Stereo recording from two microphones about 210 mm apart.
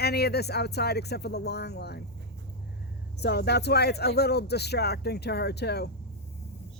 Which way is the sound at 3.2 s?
50° left (ahead or behind).